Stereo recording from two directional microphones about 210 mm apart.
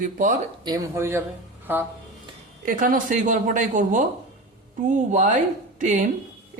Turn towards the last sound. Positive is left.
turn(degrees=-35)  # may be behind; listen again after turning